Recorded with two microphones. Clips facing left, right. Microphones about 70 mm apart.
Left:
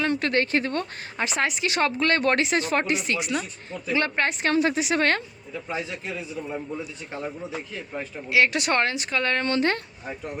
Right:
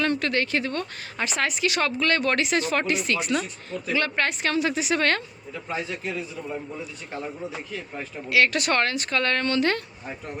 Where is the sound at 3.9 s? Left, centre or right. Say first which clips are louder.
Left 1 dB; left.